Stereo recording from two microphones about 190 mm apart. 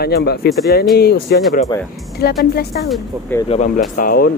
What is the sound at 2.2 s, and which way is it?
Speech, 55° left (ahead or behind).